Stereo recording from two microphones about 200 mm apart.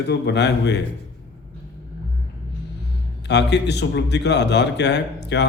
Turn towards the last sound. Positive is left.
turn(degrees=60)  # may be behind; listen again after turning